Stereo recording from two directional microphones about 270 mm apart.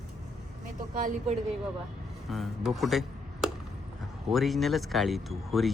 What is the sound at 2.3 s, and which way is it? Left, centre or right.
Speech, centre.